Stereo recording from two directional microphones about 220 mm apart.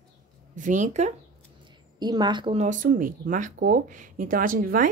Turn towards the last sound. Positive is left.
turn(degrees=-40)  # may be behind; listen again after turning